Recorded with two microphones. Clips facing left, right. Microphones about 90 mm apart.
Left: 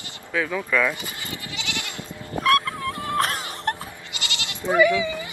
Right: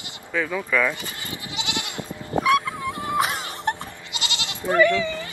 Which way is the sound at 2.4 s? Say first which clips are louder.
Left 1 dB; 5° right (ahead or behind).